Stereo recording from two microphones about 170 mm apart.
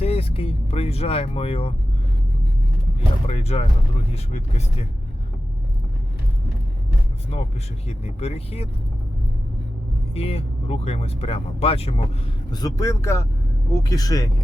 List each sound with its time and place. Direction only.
0.0 s vehicle: 35° left (ahead or behind)
3.2 s speech: 40° left (ahead or behind)
7.3 s speech: 35° left (ahead or behind)
10.2 s speech: 35° left (ahead or behind)
12.5 s speech: 20° left (ahead or behind)